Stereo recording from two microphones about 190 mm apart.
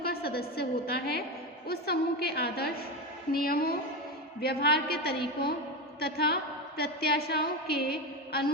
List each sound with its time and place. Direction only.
0.0 s a woman's voice: 55° left (ahead or behind)